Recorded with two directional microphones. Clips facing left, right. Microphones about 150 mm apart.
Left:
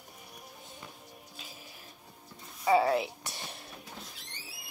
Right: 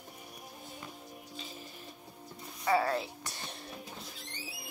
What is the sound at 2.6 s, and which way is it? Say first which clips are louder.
Speech: left 4 dB; 15° left (ahead or behind).